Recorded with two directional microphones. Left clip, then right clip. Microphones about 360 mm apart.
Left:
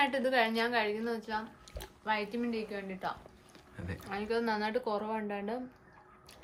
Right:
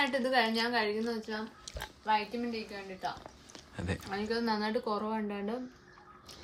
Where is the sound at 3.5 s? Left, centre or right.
Centre.